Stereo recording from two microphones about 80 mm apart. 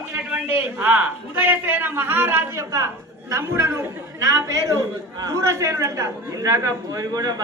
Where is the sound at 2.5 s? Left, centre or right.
Right.